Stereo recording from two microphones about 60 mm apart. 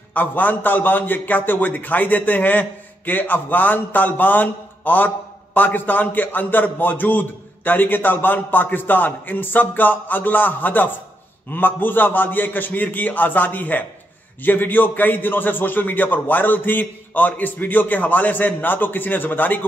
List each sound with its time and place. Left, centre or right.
0.1 s speech: left